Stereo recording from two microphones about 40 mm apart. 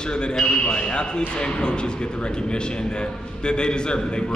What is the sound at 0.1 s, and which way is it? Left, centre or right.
A man's voice, left.